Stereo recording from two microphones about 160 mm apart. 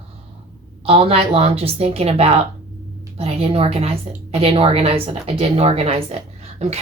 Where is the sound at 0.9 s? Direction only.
35° right (ahead or behind).